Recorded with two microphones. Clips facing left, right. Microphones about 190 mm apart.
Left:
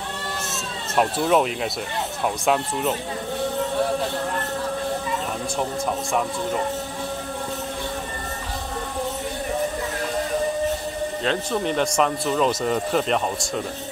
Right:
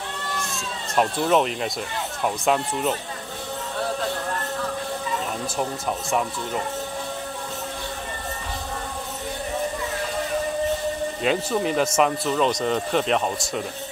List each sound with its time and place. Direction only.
0.9 s speech: 5° left (ahead or behind)
11.2 s speech: 5° right (ahead or behind)